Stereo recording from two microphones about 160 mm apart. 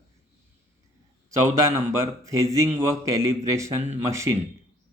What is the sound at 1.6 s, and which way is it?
A man's voice, 20° right (ahead or behind).